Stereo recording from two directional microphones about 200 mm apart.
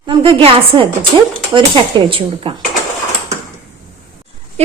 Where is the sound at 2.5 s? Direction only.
25° right (ahead or behind).